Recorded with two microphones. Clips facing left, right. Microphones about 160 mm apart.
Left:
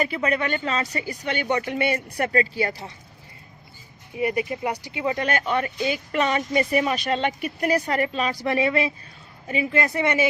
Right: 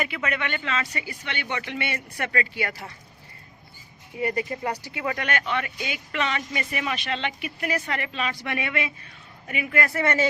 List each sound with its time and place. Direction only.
0.0 s speech: 35° left (ahead or behind)
4.2 s speech: 15° left (ahead or behind)
5.2 s speech: 35° left (ahead or behind); by 10.2 s 15° left (ahead or behind)